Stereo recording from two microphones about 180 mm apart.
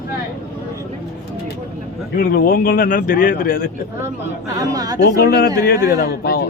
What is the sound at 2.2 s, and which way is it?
Speech, 55° left (ahead or behind).